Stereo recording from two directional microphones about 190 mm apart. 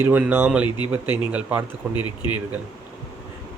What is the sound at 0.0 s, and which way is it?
Speech, 10° right (ahead or behind).